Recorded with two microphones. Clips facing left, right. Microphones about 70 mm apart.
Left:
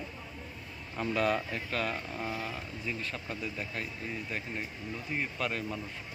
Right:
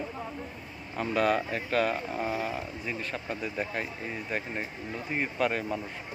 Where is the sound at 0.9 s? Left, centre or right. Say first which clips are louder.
Right 3 dB; centre.